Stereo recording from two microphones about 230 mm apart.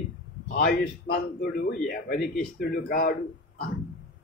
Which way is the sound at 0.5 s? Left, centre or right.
Left.